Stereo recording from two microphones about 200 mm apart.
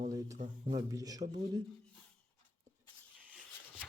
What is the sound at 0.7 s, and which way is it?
Speech, 15° right (ahead or behind).